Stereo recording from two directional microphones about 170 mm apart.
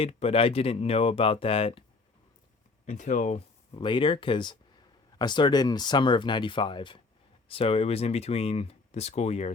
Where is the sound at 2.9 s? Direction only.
45° left (ahead or behind).